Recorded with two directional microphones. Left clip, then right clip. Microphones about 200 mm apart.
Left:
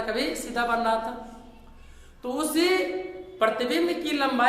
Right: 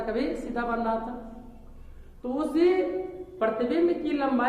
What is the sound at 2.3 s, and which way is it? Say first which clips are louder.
A woman's voice: even; 15° left (ahead or behind).